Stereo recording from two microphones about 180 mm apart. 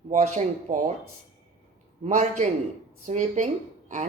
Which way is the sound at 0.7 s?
40° right (ahead or behind).